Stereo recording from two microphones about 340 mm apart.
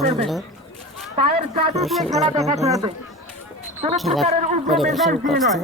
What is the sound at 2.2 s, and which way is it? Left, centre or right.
Speech, centre.